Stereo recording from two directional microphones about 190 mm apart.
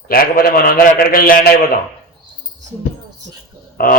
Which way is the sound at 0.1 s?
50° left (ahead or behind).